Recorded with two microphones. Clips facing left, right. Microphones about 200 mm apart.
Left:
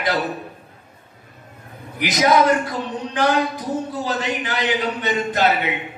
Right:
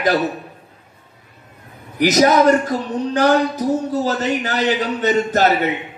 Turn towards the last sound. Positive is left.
turn(degrees=-40)  # may be behind; listen again after turning